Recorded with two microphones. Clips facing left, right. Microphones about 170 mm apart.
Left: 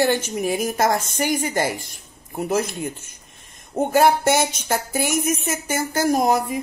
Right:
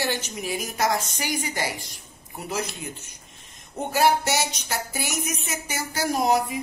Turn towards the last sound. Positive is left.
turn(degrees=50)  # may be behind; listen again after turning